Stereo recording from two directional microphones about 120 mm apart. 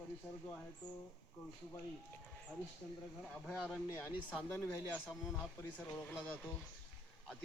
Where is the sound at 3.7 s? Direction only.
20° left (ahead or behind).